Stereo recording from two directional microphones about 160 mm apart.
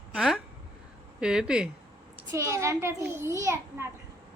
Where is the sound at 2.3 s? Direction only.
20° right (ahead or behind).